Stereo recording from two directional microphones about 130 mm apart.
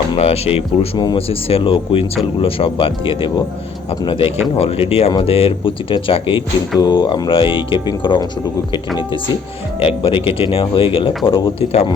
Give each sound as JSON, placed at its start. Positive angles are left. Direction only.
{"t": 0.2, "sound": "speech", "side_deg": 50}
{"t": 0.9, "sound": "speech", "side_deg": 35}
{"t": 9.8, "sound": "speech", "side_deg": 45}